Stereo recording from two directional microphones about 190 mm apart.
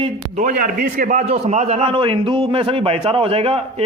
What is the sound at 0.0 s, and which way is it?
A man's voice, 40° right (ahead or behind).